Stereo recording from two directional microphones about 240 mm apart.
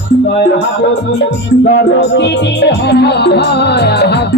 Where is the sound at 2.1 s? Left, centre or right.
Left.